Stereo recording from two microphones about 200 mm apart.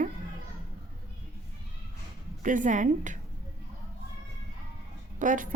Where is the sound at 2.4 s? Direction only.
40° right (ahead or behind).